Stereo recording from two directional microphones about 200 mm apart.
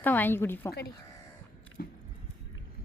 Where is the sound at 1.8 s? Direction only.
50° left (ahead or behind).